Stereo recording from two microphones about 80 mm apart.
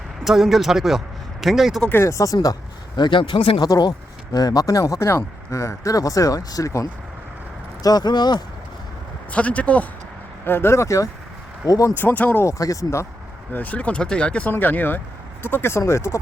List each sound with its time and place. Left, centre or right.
0.3 s a man's voice: centre
2.0 s speech: left
3.7 s speech: left
9.3 s speech: centre
10.4 s speech: left
11.9 s speech: centre
12.5 s speech: left
13.5 s speech: left